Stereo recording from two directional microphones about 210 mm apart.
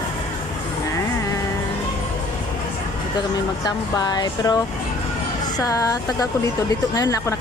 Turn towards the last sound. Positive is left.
turn(degrees=15)  # may be behind; listen again after turning